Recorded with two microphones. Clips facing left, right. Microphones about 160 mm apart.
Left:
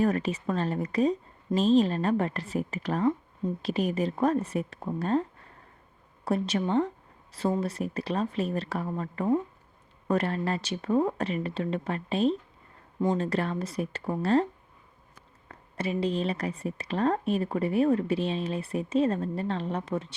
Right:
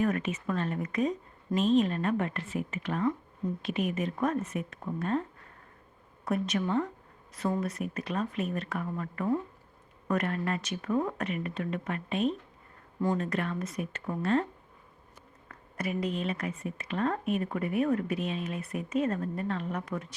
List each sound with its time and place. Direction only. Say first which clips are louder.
0.0 s a woman's voice: left 3 dB; 35° left (ahead or behind)
6.2 s a woman's voice: left 2 dB; 30° left (ahead or behind)
13.0 s speech: left 3 dB; 20° left (ahead or behind)
13.2 s a woman's voice: left 3 dB; 30° left (ahead or behind)
15.4 s a woman's voice: left 3 dB; 25° left (ahead or behind)